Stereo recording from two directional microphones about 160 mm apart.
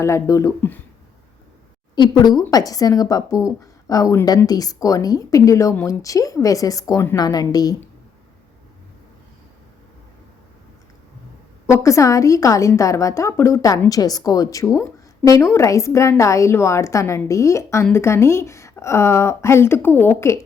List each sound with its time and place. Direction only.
0.0 s speech: 20° left (ahead or behind)
2.0 s a woman's voice: 25° left (ahead or behind)
11.6 s a woman's voice: 20° left (ahead or behind)